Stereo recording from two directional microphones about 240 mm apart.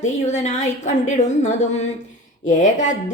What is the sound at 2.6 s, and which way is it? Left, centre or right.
Speech, left.